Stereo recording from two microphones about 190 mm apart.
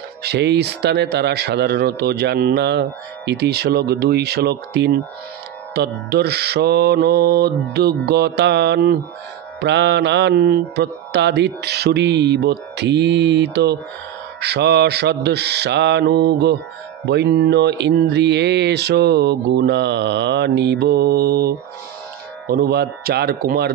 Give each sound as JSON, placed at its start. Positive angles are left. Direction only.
{"t": 0.2, "sound": "speech", "side_deg": -60}